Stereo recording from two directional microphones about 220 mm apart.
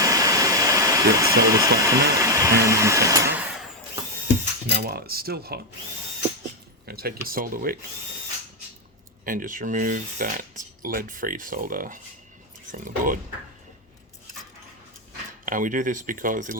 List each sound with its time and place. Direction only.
0.0 s hair dryer: 15° right (ahead or behind)
2.6 s vacuum cleaner: 15° right (ahead or behind)
3.3 s a sound: 5° right (ahead or behind)
4.7 s speech: 45° right (ahead or behind)
6.8 s speech: 45° right (ahead or behind)
9.2 s speech: 40° right (ahead or behind)
15.4 s speech: 35° right (ahead or behind)